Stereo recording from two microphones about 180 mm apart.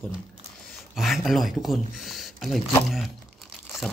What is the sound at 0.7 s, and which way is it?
Speech, centre (ahead or behind).